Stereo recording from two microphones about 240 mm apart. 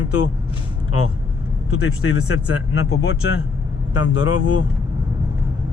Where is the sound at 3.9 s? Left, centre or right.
Left.